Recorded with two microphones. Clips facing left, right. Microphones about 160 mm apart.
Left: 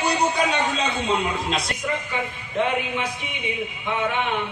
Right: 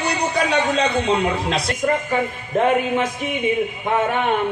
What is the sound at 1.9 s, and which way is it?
Speech, 45° right (ahead or behind).